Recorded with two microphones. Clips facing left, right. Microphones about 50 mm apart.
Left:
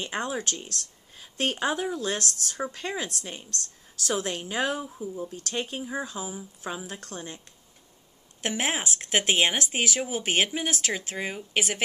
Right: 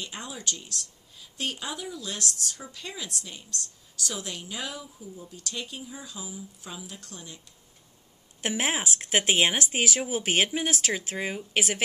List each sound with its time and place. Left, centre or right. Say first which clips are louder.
0.0 s a woman's voice: left 6 dB; left
8.4 s speech: even; centre